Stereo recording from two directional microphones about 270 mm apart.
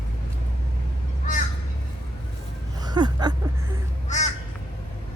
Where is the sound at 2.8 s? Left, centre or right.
Centre.